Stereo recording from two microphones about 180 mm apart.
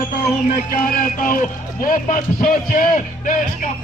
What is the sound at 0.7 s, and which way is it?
A man's voice, 50° left (ahead or behind).